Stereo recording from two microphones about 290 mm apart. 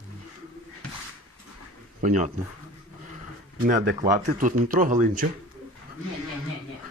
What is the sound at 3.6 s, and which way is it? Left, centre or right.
Speech, right.